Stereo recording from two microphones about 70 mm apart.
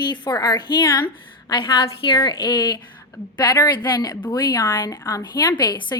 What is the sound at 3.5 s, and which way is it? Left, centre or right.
A woman's voice, left.